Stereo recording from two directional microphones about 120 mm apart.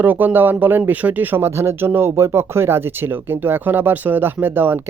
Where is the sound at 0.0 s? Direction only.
15° right (ahead or behind).